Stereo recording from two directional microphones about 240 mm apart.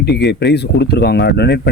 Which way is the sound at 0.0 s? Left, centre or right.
Left.